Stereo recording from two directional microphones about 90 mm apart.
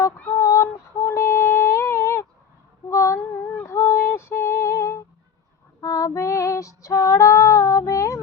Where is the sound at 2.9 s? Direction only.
35° left (ahead or behind).